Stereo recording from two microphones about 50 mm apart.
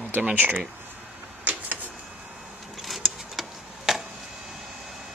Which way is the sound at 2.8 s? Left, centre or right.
Centre.